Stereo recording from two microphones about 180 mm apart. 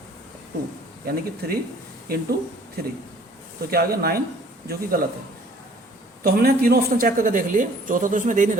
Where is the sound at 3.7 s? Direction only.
60° right (ahead or behind).